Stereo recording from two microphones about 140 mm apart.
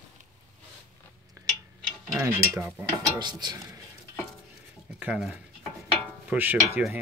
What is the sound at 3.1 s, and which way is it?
Dishes, 30° right (ahead or behind).